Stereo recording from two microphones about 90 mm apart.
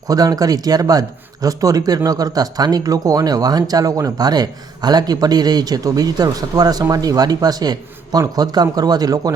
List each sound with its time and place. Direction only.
0.1 s speech: 45° right (ahead or behind)